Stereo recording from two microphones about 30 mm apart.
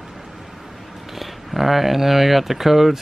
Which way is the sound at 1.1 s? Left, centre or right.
Centre.